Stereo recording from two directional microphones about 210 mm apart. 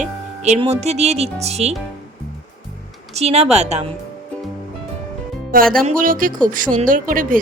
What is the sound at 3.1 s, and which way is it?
Speech, 30° right (ahead or behind).